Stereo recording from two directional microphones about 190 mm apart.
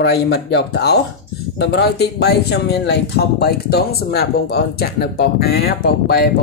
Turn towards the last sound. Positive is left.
turn(degrees=55)  # may be behind; listen again after turning